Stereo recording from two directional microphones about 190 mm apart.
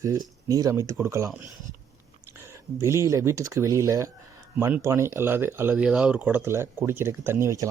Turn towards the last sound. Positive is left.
turn(degrees=-15)  # may be behind; listen again after turning